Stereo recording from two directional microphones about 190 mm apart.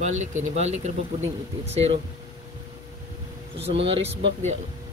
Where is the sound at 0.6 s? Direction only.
35° right (ahead or behind).